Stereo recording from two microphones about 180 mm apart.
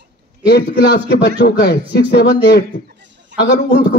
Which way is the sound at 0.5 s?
65° left (ahead or behind).